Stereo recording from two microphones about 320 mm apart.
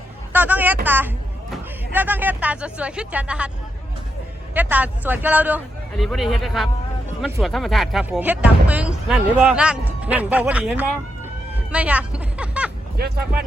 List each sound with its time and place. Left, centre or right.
0.3 s a child's voice: centre
4.5 s speech: centre
11.5 s music: centre
13.0 s speech: right